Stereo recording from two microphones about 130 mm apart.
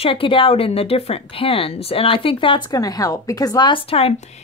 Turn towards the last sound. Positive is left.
turn(degrees=45)  # may be behind; listen again after turning